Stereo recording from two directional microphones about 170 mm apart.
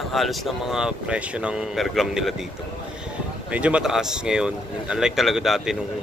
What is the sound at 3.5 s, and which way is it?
Speech, 5° right (ahead or behind).